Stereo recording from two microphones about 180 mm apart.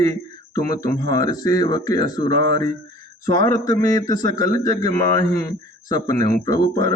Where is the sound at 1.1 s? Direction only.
20° left (ahead or behind).